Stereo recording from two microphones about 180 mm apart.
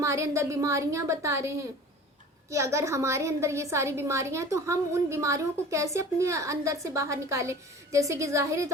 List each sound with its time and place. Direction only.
0.0 s a woman's voice: 15° right (ahead or behind)